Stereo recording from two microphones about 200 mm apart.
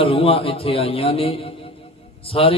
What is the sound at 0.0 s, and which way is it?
A man's voice, 30° left (ahead or behind).